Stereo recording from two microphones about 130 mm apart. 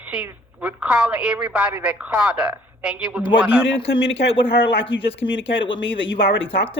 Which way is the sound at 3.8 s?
40° left (ahead or behind).